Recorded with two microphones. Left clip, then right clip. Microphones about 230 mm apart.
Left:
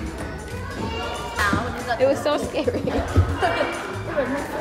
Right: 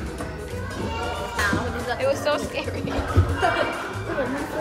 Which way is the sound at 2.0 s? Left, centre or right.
Left.